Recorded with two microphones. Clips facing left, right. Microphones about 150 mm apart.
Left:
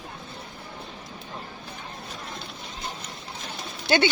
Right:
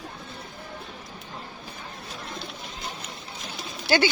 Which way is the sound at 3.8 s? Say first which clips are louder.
Even; 25° left (ahead or behind).